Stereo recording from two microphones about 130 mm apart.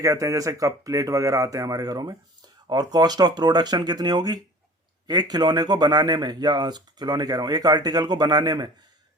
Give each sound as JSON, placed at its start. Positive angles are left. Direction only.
{"t": 0.0, "sound": "speech", "side_deg": -25}